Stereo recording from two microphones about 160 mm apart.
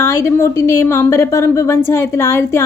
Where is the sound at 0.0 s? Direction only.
15° left (ahead or behind).